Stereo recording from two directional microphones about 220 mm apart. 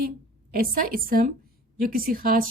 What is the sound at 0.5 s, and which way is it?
A woman's voice, 40° right (ahead or behind).